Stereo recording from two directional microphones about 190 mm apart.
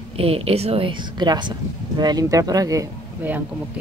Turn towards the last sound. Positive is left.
turn(degrees=-15)  # may be behind; listen again after turning